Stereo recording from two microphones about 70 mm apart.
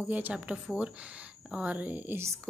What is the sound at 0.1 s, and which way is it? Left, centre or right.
Speech, centre.